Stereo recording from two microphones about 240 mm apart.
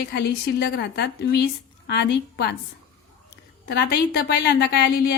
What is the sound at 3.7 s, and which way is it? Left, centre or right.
Speech, left.